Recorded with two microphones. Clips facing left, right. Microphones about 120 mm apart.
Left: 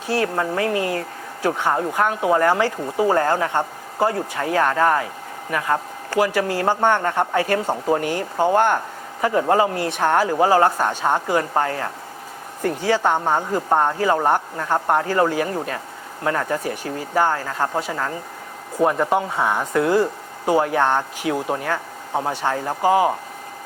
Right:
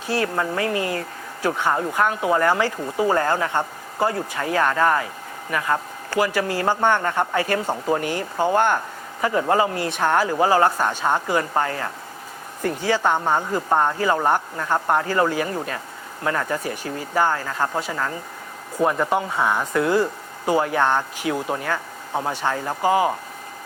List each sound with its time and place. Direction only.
0.1 s speech: 45° left (ahead or behind)
8.0 s speech: 50° left (ahead or behind)
8.4 s speech: 35° left (ahead or behind)
13.0 s speech: 30° left (ahead or behind); by 23.1 s 50° left (ahead or behind)